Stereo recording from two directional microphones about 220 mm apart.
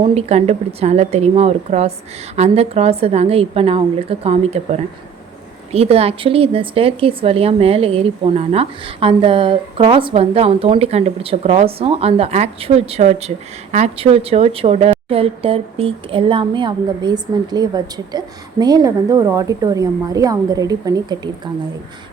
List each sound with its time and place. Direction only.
0.0 s a woman's voice: 30° right (ahead or behind)